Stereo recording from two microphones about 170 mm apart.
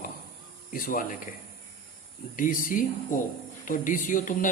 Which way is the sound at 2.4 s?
55° left (ahead or behind).